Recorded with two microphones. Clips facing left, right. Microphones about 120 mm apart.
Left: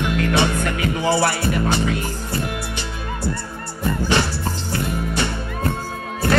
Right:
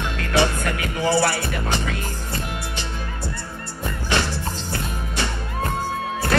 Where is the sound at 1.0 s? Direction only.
15° left (ahead or behind).